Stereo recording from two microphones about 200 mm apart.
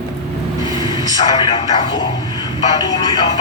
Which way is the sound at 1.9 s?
20° left (ahead or behind).